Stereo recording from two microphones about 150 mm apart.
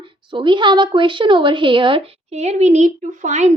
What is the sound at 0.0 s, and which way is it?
Speech, 35° right (ahead or behind).